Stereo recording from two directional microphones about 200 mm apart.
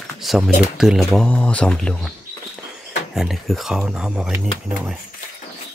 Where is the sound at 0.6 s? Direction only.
Centre (ahead or behind).